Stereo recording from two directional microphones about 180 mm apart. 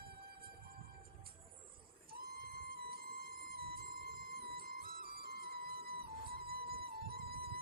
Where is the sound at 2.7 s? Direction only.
55° right (ahead or behind).